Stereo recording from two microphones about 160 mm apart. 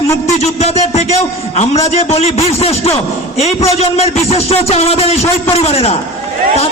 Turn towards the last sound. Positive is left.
turn(degrees=40)  # may be behind; listen again after turning